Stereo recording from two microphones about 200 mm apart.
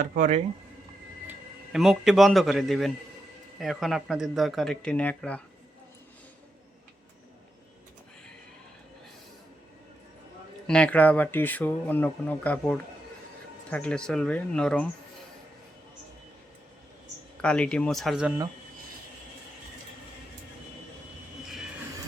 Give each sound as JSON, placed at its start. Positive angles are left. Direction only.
{"t": 0.0, "sound": "speech", "side_deg": -40}
{"t": 1.3, "sound": "a man's voice", "side_deg": -5}
{"t": 10.7, "sound": "speech", "side_deg": 5}
{"t": 17.4, "sound": "speech", "side_deg": 5}